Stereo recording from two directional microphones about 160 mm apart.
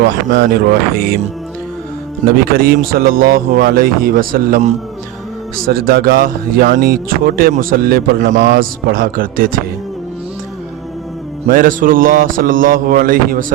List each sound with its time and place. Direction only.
0.3 s speech: 90° right
2.2 s speech: 70° right (ahead or behind)
5.6 s speech: 70° right (ahead or behind)
11.4 s speech: 60° right (ahead or behind)